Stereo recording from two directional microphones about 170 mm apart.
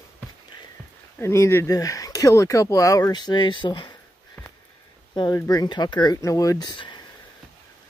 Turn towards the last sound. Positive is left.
turn(degrees=25)  # may be behind; listen again after turning